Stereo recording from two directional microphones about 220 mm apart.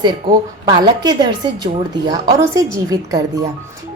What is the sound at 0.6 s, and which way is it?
A woman's voice, 20° right (ahead or behind).